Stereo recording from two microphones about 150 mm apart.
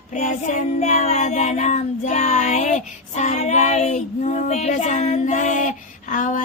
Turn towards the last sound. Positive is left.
turn(degrees=60)  # may be behind; listen again after turning